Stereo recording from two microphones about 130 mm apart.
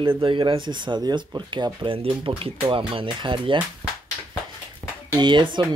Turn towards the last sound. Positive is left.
turn(degrees=-35)  # may be behind; listen again after turning